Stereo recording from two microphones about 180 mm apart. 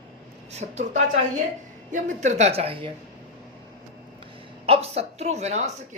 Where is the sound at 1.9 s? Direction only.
40° right (ahead or behind).